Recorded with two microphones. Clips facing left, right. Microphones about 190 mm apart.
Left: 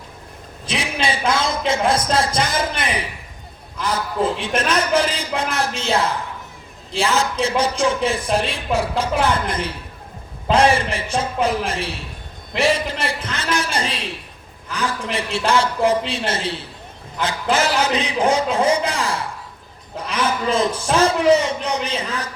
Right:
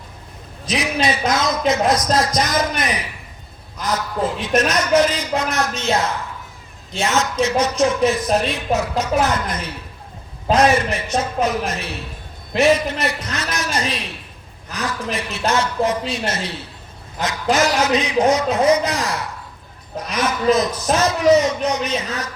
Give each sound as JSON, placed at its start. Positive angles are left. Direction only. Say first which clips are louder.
{"t": 0.6, "sound": "a man's voice", "louder": "right 3 dB", "side_deg": 30}